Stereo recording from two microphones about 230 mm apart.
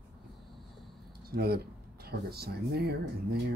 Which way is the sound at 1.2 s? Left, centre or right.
Right.